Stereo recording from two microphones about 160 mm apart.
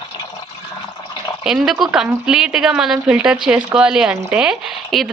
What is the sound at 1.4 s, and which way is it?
Speech, 5° right (ahead or behind).